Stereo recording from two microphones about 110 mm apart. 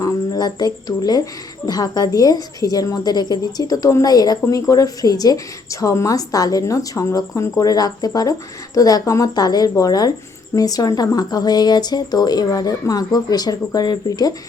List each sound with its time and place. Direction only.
0.0 s speech: 35° left (ahead or behind)